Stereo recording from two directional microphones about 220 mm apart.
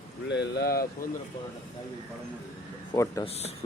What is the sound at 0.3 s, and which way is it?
Speech, 50° left (ahead or behind).